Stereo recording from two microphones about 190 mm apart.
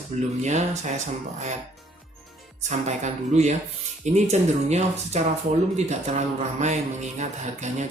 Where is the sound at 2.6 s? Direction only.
35° right (ahead or behind).